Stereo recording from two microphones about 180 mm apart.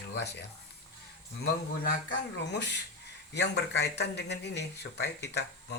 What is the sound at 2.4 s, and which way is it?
Speech, 75° left (ahead or behind).